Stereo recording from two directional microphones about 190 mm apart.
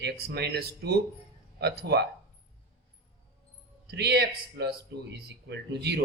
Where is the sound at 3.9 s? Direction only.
60° right (ahead or behind).